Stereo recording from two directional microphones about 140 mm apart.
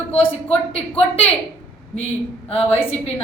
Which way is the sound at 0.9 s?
45° left (ahead or behind).